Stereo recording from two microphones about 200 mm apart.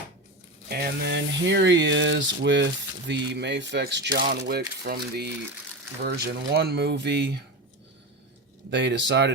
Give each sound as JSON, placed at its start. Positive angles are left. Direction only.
{"t": 0.7, "sound": "speech", "side_deg": -50}
{"t": 8.7, "sound": "speech", "side_deg": -60}